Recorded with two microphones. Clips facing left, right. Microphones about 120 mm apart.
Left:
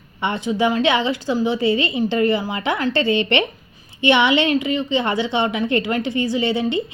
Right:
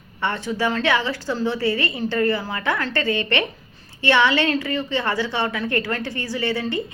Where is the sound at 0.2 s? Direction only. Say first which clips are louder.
Left 4 dB; 15° left (ahead or behind).